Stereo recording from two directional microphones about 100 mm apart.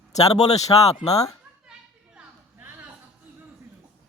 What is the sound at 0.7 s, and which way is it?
Speech, 50° left (ahead or behind).